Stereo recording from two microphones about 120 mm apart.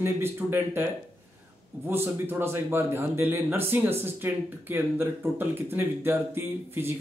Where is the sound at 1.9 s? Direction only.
20° right (ahead or behind).